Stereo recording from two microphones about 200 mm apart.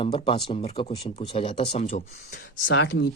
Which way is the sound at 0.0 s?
25° left (ahead or behind).